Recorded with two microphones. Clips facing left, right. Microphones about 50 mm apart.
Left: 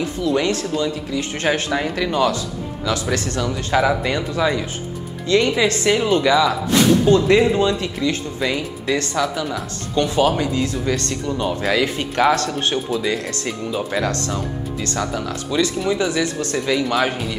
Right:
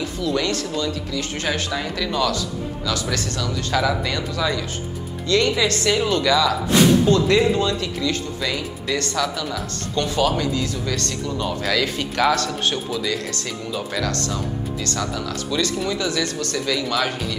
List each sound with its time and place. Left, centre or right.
0.0 s speech: left